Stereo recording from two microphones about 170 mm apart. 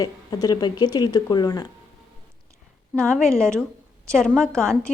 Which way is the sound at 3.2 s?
5° left (ahead or behind).